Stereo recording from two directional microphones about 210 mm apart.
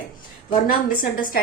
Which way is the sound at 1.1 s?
40° left (ahead or behind).